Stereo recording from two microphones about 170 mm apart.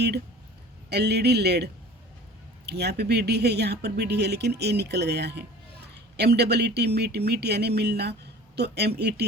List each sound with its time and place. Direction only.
0.9 s speech: 75° right (ahead or behind)